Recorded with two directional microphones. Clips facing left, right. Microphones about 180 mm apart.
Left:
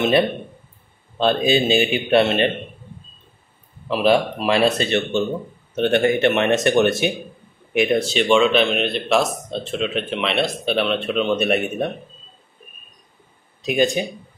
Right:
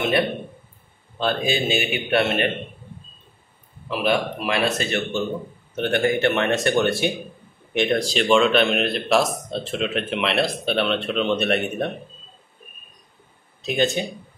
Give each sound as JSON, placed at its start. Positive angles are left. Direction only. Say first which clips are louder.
{"t": 1.2, "sound": "speech", "louder": "left 5 dB", "side_deg": 20}
{"t": 3.9, "sound": "speech", "louder": "left 5 dB", "side_deg": 30}
{"t": 7.7, "sound": "speech", "louder": "left 3 dB", "side_deg": 10}
{"t": 13.6, "sound": "speech", "louder": "left 3 dB", "side_deg": 10}